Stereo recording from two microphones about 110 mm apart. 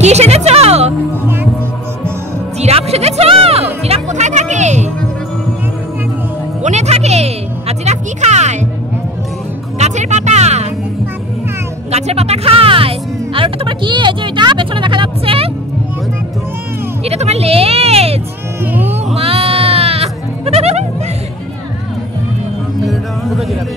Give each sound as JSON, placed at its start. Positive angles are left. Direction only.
{"t": 0.0, "sound": "music", "side_deg": -90}
{"t": 1.2, "sound": "music", "side_deg": -20}
{"t": 2.6, "sound": "music", "side_deg": -70}
{"t": 3.8, "sound": "music", "side_deg": -80}
{"t": 6.6, "sound": "music", "side_deg": -90}
{"t": 9.8, "sound": "music", "side_deg": -90}
{"t": 11.9, "sound": "music", "side_deg": -70}
{"t": 17.0, "sound": "music", "side_deg": -75}
{"t": 18.6, "sound": "music", "side_deg": -15}
{"t": 19.1, "sound": "music", "side_deg": -65}
{"t": 22.8, "sound": "music", "side_deg": 0}